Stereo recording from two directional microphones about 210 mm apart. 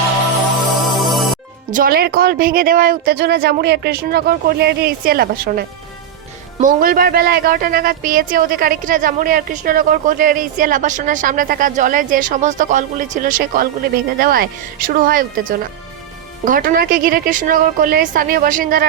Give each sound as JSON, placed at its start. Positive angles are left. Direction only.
{"t": 0.8, "sound": "music", "side_deg": 0}
{"t": 1.7, "sound": "speech", "side_deg": -45}